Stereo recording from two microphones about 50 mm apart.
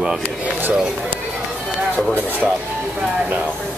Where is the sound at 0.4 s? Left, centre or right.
Right.